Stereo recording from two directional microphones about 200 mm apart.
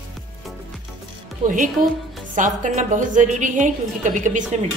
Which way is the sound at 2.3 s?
40° right (ahead or behind).